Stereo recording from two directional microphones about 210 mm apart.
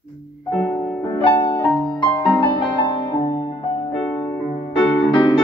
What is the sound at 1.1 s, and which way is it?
Music, 20° left (ahead or behind).